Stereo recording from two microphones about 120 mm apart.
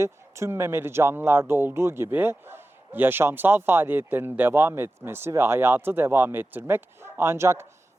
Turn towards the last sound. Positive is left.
turn(degrees=-20)  # may be behind; listen again after turning